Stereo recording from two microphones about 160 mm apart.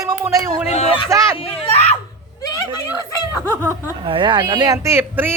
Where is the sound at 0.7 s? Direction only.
45° left (ahead or behind).